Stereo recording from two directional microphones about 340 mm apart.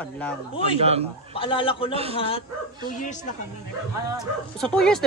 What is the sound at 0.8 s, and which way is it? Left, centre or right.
Speech, centre.